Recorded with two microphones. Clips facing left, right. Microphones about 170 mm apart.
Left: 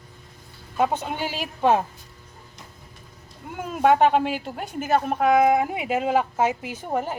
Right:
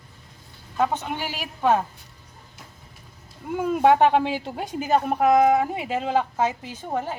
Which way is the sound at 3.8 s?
15° right (ahead or behind).